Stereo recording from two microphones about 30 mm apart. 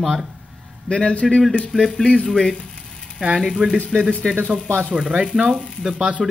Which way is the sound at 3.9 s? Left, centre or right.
Centre.